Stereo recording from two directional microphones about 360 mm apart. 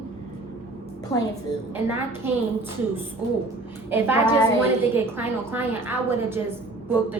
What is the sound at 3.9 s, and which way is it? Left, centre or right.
A woman's voice, centre.